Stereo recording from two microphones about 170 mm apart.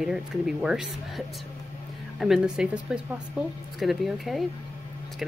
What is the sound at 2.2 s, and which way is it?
Speech, 5° right (ahead or behind).